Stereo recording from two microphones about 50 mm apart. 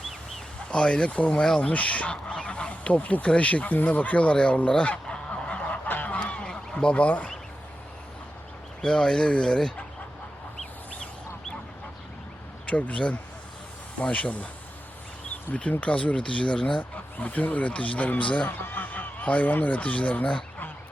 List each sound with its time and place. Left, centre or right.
0.7 s speech: centre
5.9 s fowl: left
8.8 s speech: centre
12.6 s speech: left
15.7 s speech: left
18.4 s speech: left